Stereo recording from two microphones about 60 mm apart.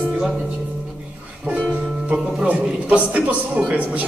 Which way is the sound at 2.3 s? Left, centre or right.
Centre.